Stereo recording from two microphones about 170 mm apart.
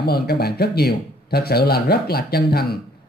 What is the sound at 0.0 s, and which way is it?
Speech, 65° left (ahead or behind).